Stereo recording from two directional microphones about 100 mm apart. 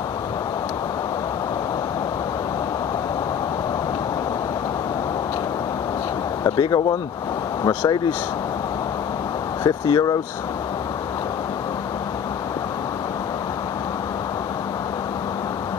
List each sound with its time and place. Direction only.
6.4 s speech: 45° left (ahead or behind)
9.6 s speech: 45° left (ahead or behind)